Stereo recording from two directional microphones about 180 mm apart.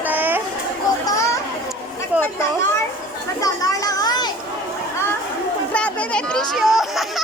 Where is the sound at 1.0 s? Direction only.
20° left (ahead or behind).